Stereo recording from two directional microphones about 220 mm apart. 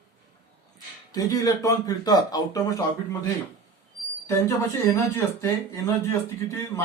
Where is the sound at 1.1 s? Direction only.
15° left (ahead or behind).